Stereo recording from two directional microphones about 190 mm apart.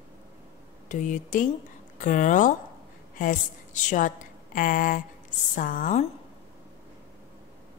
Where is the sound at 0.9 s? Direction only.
40° left (ahead or behind).